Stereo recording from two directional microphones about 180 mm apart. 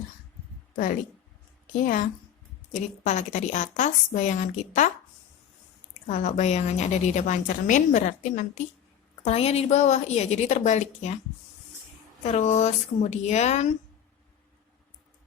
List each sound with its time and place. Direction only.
1.6 s a woman's voice: 50° left (ahead or behind)
6.1 s a woman's voice: 40° left (ahead or behind)
12.2 s a woman's voice: 40° left (ahead or behind)